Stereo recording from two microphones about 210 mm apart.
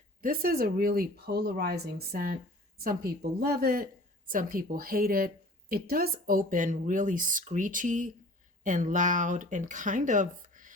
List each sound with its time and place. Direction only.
0.2 s speech: 45° right (ahead or behind)